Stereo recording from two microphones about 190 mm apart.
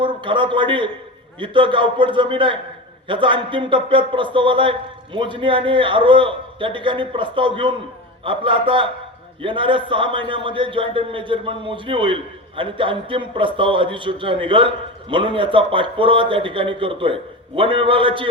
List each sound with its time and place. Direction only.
0.0 s a man's voice: 25° right (ahead or behind)